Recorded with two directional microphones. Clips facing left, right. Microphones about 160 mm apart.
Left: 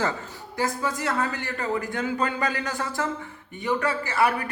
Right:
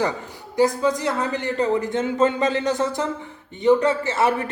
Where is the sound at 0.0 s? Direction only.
15° right (ahead or behind).